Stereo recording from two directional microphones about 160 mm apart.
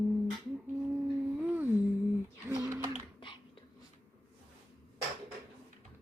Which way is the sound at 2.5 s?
20° right (ahead or behind).